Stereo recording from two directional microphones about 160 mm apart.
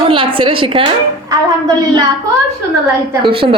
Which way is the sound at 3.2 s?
35° right (ahead or behind).